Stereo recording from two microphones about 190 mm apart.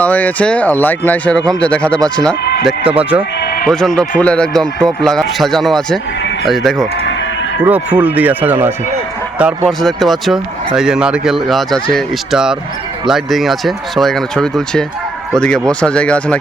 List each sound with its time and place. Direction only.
0.0 s speech: 10° left (ahead or behind)
2.4 s chicken: 60° left (ahead or behind)
2.6 s speech: 5° right (ahead or behind)
3.4 s music: 50° left (ahead or behind)
3.7 s speech: 5° left (ahead or behind)
7.0 s sheep: 75° left (ahead or behind)
7.6 s speech: 10° right (ahead or behind)